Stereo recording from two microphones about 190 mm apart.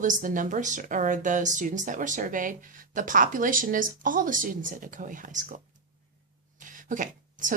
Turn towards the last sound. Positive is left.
turn(degrees=-45)  # may be behind; listen again after turning